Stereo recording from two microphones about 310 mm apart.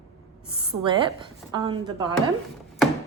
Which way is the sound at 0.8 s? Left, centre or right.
Centre.